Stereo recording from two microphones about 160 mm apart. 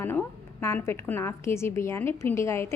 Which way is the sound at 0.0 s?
15° left (ahead or behind).